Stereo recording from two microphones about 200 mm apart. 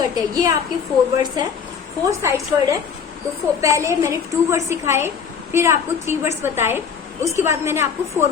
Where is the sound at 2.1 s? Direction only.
15° right (ahead or behind).